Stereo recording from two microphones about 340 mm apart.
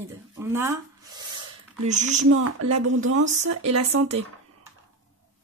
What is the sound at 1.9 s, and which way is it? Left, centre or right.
Speech, right.